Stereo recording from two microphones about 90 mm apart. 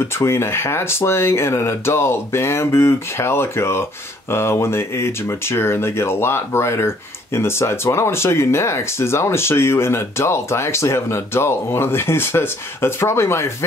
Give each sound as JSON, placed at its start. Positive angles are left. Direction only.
{"t": 0.2, "sound": "speech", "side_deg": 30}